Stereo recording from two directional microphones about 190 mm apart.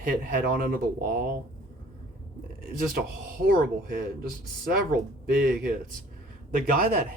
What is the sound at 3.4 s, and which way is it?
Speech, 50° right (ahead or behind).